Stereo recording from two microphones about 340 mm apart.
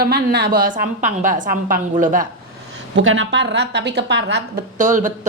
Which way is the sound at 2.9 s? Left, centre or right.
Right.